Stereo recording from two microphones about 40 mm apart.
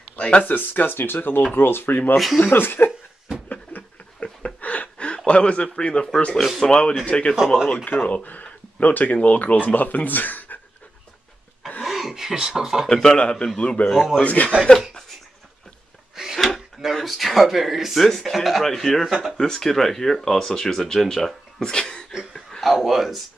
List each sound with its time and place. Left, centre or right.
0.4 s speech: left
2.1 s speech: centre
2.5 s speech: left
4.2 s a sound: left
6.6 s speech: centre
7.3 s speech: centre
8.0 s speech: left
11.8 s a sound: centre
12.8 s speech: centre; by 14.5 s left
16.2 s a sound: centre
16.9 s speech: centre
22.3 s a sound: centre